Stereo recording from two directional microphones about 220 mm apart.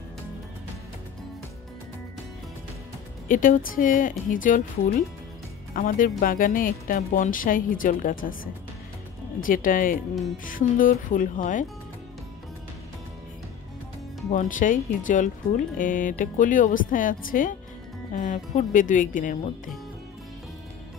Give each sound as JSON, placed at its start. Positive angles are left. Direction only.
{"t": 3.3, "sound": "speech", "side_deg": 40}
{"t": 9.4, "sound": "speech", "side_deg": 40}
{"t": 14.3, "sound": "speech", "side_deg": 35}